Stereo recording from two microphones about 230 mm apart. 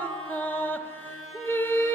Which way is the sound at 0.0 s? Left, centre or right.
Centre.